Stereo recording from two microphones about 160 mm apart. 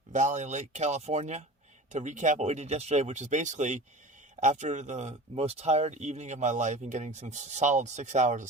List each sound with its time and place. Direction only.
0.1 s speech: 50° right (ahead or behind)